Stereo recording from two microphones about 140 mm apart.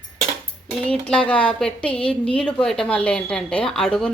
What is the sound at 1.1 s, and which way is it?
A woman's voice, 10° left (ahead or behind).